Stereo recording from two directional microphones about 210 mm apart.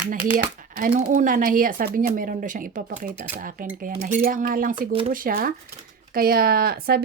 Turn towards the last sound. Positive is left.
turn(degrees=-45)  # may be behind; listen again after turning